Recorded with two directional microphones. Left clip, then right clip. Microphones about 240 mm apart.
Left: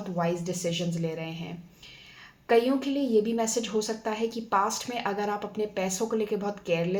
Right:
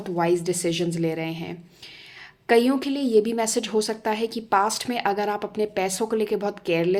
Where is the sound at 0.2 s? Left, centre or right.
Right.